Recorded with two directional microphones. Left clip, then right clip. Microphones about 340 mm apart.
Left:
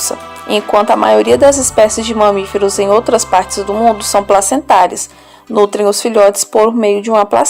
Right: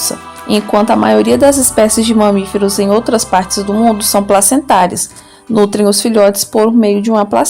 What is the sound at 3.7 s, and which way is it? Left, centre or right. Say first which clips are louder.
A woman's voice: left 1 dB; right.